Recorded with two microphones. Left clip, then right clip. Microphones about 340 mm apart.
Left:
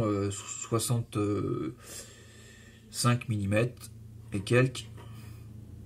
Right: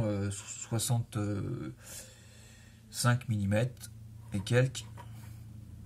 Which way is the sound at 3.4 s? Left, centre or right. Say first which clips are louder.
Left 4 dB; right.